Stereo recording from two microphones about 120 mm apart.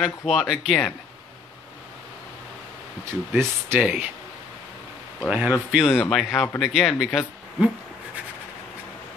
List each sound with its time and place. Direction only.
0.0 s speech: 5° right (ahead or behind)
3.1 s speech: 20° right (ahead or behind)
5.3 s speech: 10° right (ahead or behind)